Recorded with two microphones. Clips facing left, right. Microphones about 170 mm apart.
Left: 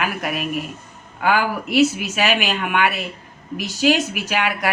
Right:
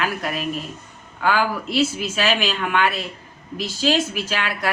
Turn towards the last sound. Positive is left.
turn(degrees=15)  # may be behind; listen again after turning